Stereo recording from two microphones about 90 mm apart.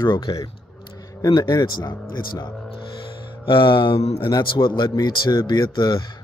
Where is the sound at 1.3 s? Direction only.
50° left (ahead or behind).